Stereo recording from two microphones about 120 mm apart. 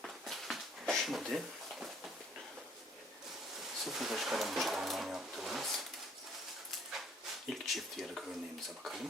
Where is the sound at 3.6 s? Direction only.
Centre (ahead or behind).